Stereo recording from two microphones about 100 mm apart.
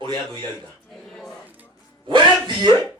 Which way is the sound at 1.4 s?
15° right (ahead or behind).